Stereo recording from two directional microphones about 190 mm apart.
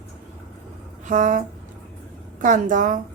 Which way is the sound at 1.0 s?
40° right (ahead or behind).